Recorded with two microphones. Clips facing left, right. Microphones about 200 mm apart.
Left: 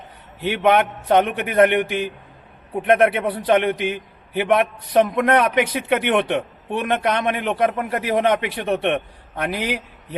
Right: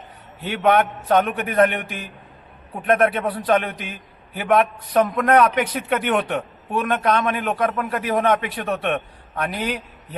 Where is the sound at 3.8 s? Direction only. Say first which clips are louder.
Left 10 dB; 75° left (ahead or behind).